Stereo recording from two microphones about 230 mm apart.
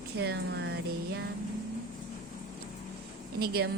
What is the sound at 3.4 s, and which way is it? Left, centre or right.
Speech, right.